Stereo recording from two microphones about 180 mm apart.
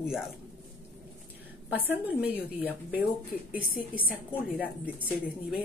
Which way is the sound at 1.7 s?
10° right (ahead or behind).